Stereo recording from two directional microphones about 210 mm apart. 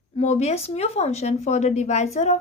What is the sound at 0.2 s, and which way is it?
A woman's voice, 30° left (ahead or behind).